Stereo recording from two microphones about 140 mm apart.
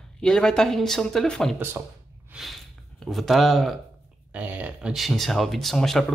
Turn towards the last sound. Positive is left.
turn(degrees=5)  # may be behind; listen again after turning